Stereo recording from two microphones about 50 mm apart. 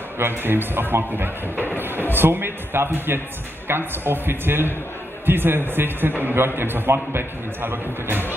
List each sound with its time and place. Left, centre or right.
0.2 s a man's voice: right